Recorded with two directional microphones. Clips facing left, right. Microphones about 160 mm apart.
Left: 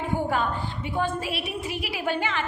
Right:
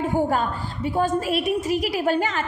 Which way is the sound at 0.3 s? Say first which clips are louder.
Right 2 dB; 40° right (ahead or behind).